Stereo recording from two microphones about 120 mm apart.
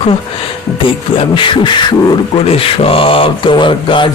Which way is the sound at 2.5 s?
50° left (ahead or behind).